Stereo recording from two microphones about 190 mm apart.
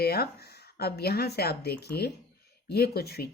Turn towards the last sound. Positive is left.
turn(degrees=55)  # may be behind; listen again after turning